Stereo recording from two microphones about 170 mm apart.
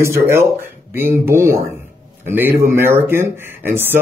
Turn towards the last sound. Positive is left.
turn(degrees=-15)  # may be behind; listen again after turning